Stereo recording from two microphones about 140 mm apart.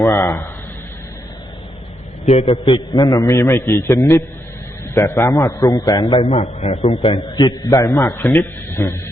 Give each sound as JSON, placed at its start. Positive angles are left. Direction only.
{"t": 0.0, "sound": "a man's voice", "side_deg": 25}
{"t": 2.2, "sound": "a man's voice", "side_deg": 45}
{"t": 2.7, "sound": "a man's voice", "side_deg": 30}